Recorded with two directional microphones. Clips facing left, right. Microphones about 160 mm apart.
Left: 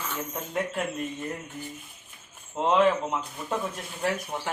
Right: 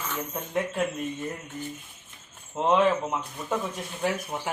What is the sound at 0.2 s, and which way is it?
Speech, centre (ahead or behind).